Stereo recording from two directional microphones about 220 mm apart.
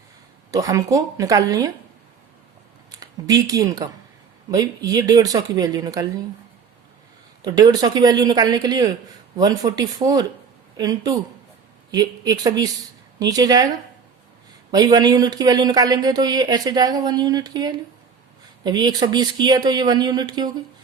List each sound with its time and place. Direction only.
0.5 s speech: 15° right (ahead or behind)
3.0 s speech: 15° right (ahead or behind)
7.4 s speech: 15° right (ahead or behind)